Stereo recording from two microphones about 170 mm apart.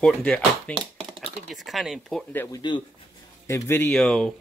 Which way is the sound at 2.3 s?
25° left (ahead or behind).